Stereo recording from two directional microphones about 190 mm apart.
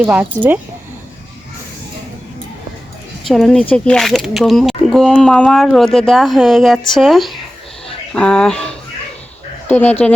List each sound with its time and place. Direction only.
0.0 s speech: 10° right (ahead or behind)
3.2 s speech: centre (ahead or behind)